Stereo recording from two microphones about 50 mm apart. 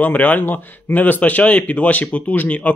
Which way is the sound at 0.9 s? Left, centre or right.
Left.